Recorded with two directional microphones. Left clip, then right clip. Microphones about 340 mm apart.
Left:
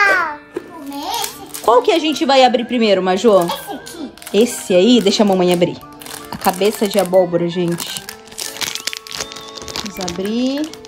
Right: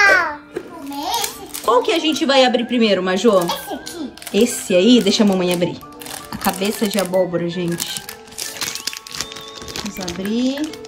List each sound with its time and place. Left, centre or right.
0.0 s babbling: centre
1.7 s speech: centre
8.5 s music: left
10.0 s speech: centre